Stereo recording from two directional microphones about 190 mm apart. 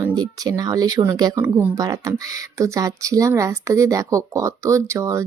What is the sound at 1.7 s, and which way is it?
Speech, 20° right (ahead or behind).